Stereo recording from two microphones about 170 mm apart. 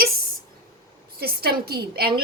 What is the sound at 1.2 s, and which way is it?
A woman's voice, 65° right (ahead or behind).